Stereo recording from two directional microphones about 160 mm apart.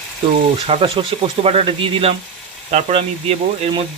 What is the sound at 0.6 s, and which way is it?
Speech, 35° right (ahead or behind).